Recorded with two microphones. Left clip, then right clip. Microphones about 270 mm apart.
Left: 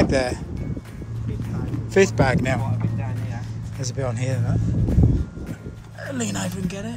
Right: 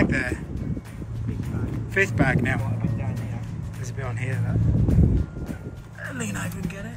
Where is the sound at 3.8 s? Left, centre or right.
Centre.